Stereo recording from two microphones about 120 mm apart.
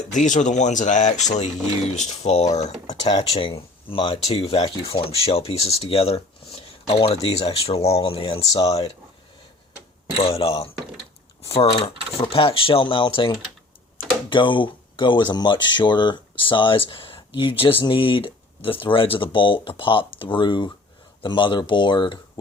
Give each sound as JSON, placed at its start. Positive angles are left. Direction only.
{"t": 0.1, "sound": "speech", "side_deg": 90}
{"t": 3.0, "sound": "speech", "side_deg": 35}
{"t": 3.3, "sound": "speech", "side_deg": 50}
{"t": 10.2, "sound": "speech", "side_deg": 55}